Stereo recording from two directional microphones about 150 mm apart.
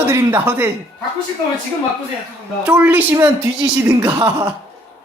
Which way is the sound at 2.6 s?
10° right (ahead or behind).